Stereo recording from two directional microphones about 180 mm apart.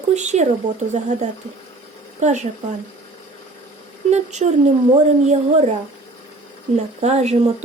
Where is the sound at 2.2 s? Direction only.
40° right (ahead or behind).